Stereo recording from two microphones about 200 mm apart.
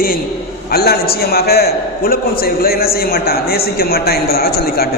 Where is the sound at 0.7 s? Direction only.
50° left (ahead or behind).